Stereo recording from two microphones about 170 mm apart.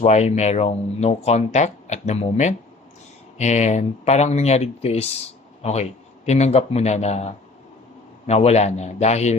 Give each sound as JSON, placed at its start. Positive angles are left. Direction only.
{"t": 0.0, "sound": "speech", "side_deg": 40}
{"t": 8.3, "sound": "speech", "side_deg": 40}